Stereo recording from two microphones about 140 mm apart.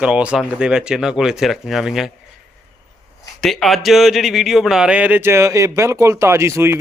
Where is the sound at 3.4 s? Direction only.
Centre (ahead or behind).